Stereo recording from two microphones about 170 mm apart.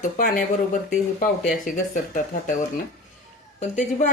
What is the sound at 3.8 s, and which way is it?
Speech, 50° left (ahead or behind).